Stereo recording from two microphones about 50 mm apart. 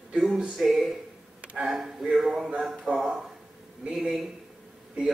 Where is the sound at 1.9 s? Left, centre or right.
Centre.